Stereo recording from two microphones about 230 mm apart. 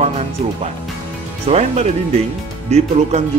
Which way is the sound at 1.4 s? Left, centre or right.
Right.